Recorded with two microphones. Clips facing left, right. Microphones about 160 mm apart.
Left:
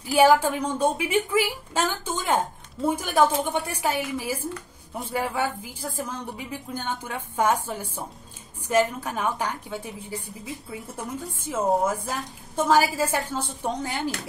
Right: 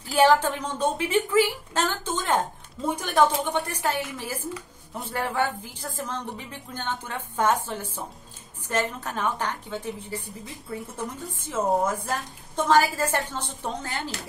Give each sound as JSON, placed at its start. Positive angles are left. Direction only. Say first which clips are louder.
{"t": 0.0, "sound": "a woman's voice", "louder": "left 2 dB", "side_deg": 10}